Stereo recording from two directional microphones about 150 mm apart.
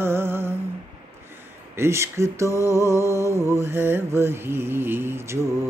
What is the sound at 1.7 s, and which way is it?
Mantra, 15° right (ahead or behind).